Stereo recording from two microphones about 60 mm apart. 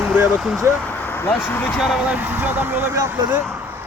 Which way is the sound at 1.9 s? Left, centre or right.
Right.